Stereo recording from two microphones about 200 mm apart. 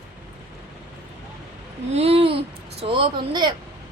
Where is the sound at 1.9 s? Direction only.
30° right (ahead or behind).